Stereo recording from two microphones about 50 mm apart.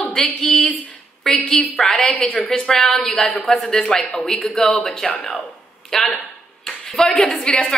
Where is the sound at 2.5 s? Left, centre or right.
Centre.